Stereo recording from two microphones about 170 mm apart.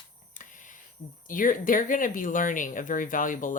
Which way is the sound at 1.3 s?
50° left (ahead or behind).